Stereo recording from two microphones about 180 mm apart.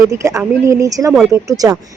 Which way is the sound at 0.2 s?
15° right (ahead or behind).